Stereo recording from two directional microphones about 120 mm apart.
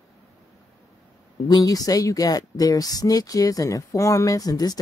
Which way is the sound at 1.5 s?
30° left (ahead or behind).